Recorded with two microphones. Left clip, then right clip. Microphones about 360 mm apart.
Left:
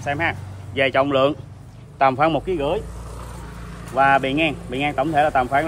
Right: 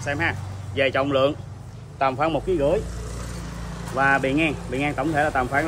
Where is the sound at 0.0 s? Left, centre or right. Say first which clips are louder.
Left 2 dB; centre.